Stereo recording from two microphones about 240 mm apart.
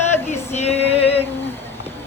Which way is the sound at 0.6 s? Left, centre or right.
Left.